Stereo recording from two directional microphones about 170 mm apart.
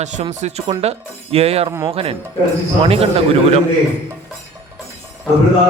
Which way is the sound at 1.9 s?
35° right (ahead or behind).